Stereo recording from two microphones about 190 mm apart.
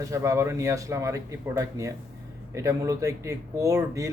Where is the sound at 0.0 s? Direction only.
15° right (ahead or behind).